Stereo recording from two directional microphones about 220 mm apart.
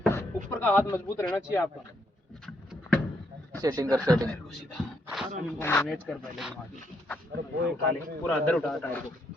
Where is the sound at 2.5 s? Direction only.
5° left (ahead or behind).